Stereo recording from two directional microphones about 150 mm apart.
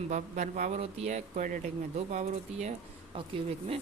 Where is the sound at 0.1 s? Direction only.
55° right (ahead or behind).